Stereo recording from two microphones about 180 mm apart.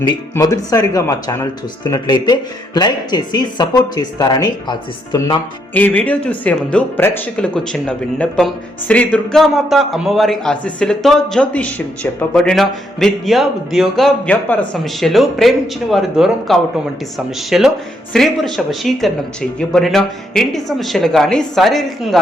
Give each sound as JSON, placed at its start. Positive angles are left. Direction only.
{"t": 0.0, "sound": "speech", "side_deg": 20}
{"t": 5.7, "sound": "speech", "side_deg": 10}